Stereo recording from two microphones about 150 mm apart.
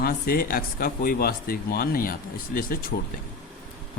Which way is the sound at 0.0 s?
80° left.